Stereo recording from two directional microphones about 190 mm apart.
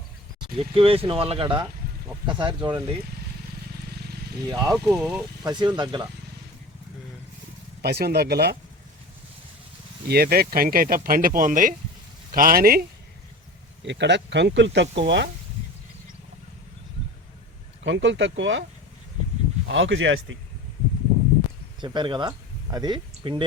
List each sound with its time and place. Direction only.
0.5 s speech: 30° right (ahead or behind)
4.0 s vehicle: 55° right (ahead or behind)
4.4 s speech: 20° right (ahead or behind)
4.9 s speech: 5° right (ahead or behind)
5.4 s speech: 20° right (ahead or behind)
7.8 s speech: 55° right (ahead or behind)
10.1 s speech: 55° right (ahead or behind)
13.8 s speech: 65° right (ahead or behind)
17.8 s speech: 70° right (ahead or behind)
19.6 s speech: 80° right
21.8 s speech: 25° right (ahead or behind)